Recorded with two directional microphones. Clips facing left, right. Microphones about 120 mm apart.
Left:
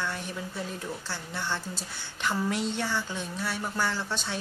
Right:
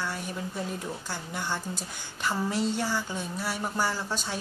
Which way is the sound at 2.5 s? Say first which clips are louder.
Right 2 dB; 40° right (ahead or behind).